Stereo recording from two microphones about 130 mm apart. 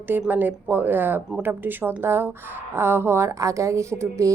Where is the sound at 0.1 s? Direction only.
15° right (ahead or behind).